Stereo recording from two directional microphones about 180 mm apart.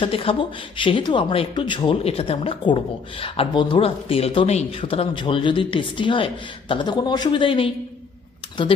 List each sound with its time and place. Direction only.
0.0 s speech: 30° left (ahead or behind)